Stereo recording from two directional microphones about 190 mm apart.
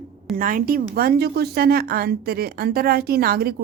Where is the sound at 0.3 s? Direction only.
45° right (ahead or behind).